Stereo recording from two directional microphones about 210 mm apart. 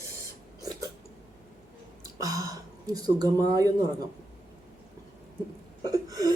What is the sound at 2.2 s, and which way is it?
Speech, 15° right (ahead or behind).